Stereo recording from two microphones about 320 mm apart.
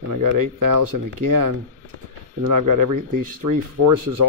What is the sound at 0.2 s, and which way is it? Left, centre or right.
Speech, right.